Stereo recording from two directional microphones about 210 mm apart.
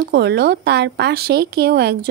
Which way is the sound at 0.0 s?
50° right (ahead or behind).